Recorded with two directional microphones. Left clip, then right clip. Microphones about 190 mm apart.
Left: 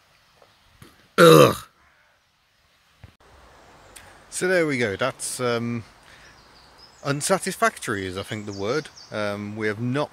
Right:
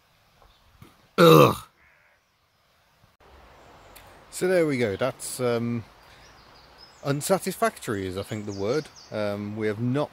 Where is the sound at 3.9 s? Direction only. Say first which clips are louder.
Left 4 dB; 5° left (ahead or behind).